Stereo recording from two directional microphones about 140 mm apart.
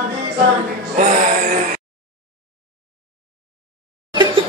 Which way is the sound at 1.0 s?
70° right (ahead or behind).